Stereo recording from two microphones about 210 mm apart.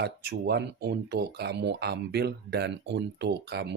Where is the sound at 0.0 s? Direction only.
50° right (ahead or behind).